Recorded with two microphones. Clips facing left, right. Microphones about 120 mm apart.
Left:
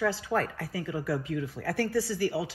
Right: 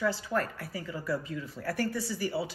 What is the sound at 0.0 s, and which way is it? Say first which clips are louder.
A woman's voice: left 2 dB; 90° left.